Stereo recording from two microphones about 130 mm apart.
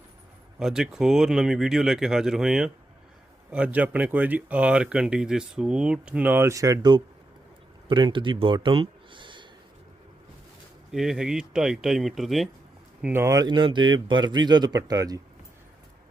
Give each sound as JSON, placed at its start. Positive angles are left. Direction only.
{"t": 0.6, "sound": "speech", "side_deg": -5}
{"t": 10.9, "sound": "speech", "side_deg": -5}
{"t": 13.1, "sound": "speech", "side_deg": -25}